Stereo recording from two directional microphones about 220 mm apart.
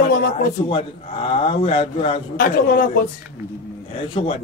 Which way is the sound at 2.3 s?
40° left (ahead or behind).